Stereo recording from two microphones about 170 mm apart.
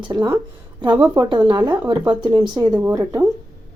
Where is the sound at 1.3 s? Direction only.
25° right (ahead or behind).